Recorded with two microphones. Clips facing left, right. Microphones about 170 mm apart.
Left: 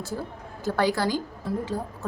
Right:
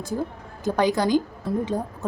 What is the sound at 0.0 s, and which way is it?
A woman's voice, 15° right (ahead or behind).